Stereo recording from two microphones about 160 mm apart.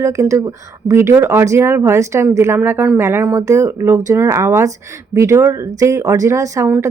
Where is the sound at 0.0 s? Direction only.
20° right (ahead or behind).